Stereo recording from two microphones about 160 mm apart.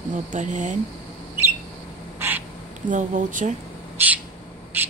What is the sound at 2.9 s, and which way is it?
Speech, 50° right (ahead or behind).